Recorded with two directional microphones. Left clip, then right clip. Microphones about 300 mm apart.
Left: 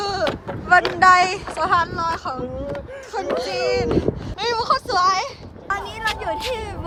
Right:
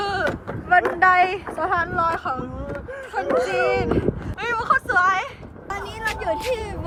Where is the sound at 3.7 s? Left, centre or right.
Centre.